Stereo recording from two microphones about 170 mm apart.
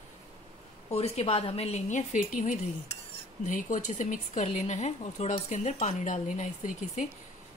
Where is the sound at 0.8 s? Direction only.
35° left (ahead or behind).